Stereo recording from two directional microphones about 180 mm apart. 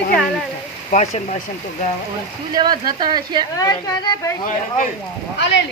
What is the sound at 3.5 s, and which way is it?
Speech, 20° left (ahead or behind).